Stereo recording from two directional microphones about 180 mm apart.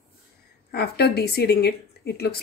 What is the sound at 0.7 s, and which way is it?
A woman's voice, 60° left (ahead or behind).